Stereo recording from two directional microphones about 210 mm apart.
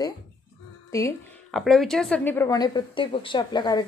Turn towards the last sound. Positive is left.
turn(degrees=20)  # may be behind; listen again after turning